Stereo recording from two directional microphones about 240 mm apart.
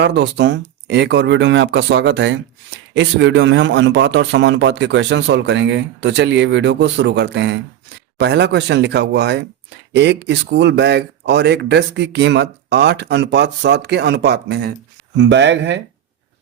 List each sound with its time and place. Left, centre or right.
0.0 s speech: right